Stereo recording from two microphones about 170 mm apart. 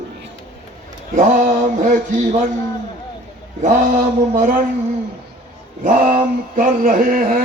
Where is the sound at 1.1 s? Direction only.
50° right (ahead or behind).